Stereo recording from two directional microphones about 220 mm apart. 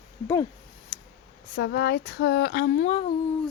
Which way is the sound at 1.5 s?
50° left (ahead or behind).